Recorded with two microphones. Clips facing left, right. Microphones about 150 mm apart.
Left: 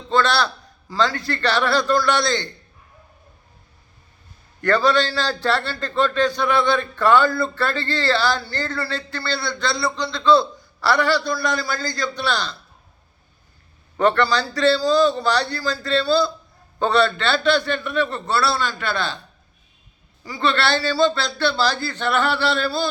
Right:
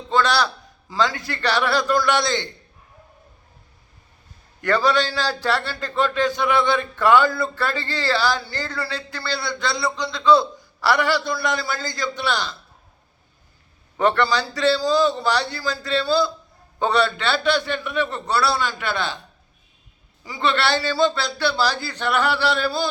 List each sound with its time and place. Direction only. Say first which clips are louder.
0.1 s a man's voice: left 1 dB; 15° right (ahead or behind)
4.6 s a man's voice: left 1 dB; 15° right (ahead or behind)
14.0 s a man's voice: left 1 dB; 15° right (ahead or behind)
20.2 s a man's voice: left 1 dB; 20° right (ahead or behind)